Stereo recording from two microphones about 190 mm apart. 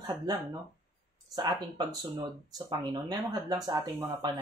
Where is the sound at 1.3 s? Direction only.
20° right (ahead or behind).